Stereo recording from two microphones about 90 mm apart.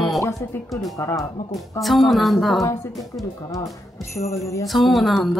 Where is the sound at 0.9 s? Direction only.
35° left (ahead or behind).